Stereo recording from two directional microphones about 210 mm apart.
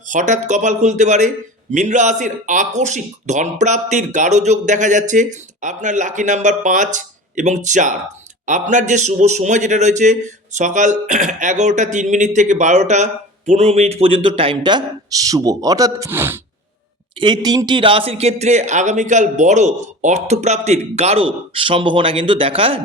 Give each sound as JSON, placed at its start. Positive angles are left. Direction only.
{"t": 0.1, "sound": "a man's voice", "side_deg": -35}
{"t": 17.2, "sound": "a man's voice", "side_deg": -20}